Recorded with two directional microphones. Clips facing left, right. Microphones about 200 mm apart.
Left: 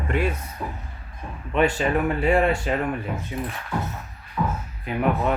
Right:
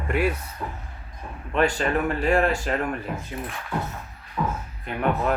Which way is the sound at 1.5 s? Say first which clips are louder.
Left 1 dB; 5° left (ahead or behind).